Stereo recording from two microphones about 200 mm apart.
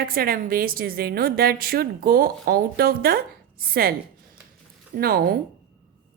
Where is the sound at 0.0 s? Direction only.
45° right (ahead or behind).